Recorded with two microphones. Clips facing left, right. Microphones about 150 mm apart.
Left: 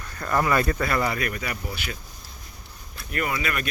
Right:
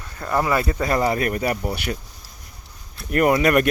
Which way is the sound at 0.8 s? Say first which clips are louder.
Right 5 dB; 35° right (ahead or behind).